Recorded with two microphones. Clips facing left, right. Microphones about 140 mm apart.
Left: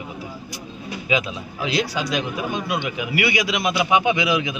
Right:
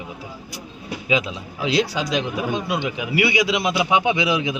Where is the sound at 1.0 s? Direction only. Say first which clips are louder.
Right 1 dB; 25° right (ahead or behind).